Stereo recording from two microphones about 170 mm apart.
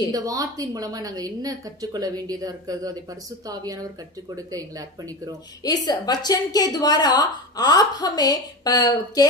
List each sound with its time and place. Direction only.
0.1 s a woman's voice: 20° right (ahead or behind)
5.6 s a woman's voice: 25° left (ahead or behind)